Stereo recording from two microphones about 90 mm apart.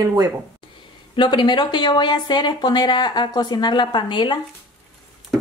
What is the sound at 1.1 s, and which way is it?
Speech, 55° left (ahead or behind).